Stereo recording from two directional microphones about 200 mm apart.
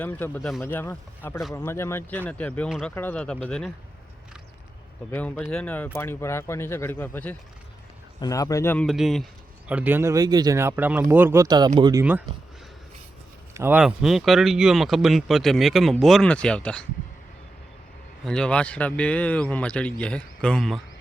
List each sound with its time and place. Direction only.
0.0 s speech: 10° left (ahead or behind)
5.1 s speech: 5° left (ahead or behind); by 12.2 s 10° right (ahead or behind)
13.5 s speech: 10° right (ahead or behind); by 16.8 s 5° left (ahead or behind)
18.3 s speech: 5° left (ahead or behind)